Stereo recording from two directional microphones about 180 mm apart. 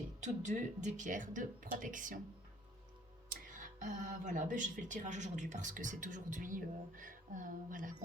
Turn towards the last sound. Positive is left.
turn(degrees=-45)  # may be behind; listen again after turning